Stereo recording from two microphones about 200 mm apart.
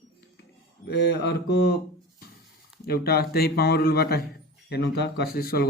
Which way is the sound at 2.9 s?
50° left (ahead or behind).